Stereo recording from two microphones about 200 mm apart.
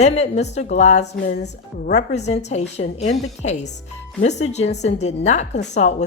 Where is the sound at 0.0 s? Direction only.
35° left (ahead or behind).